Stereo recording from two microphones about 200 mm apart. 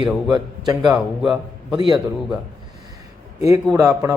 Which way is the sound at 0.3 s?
20° right (ahead or behind).